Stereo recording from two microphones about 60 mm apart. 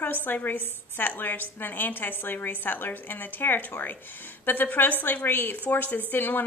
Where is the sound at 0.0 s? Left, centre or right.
Left.